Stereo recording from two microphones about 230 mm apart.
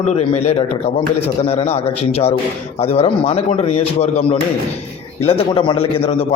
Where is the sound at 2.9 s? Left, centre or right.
Left.